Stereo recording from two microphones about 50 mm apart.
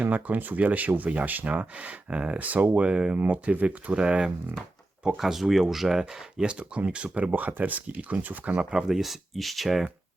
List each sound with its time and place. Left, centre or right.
0.0 s speech: right
4.0 s speech: centre
5.0 s speech: centre; by 7.3 s right
7.3 s speech: right
8.5 s speech: centre